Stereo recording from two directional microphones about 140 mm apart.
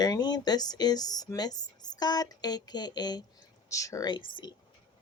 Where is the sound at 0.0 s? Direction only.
30° left (ahead or behind).